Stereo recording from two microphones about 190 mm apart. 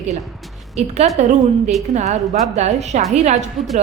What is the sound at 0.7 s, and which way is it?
A woman's voice, 35° right (ahead or behind).